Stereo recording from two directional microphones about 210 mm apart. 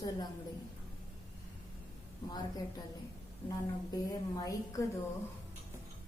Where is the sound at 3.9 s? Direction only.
15° left (ahead or behind).